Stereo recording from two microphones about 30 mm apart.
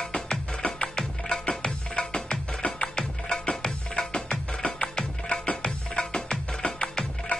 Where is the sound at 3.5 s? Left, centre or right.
Left.